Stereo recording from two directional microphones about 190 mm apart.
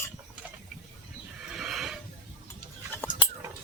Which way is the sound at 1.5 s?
Centre (ahead or behind).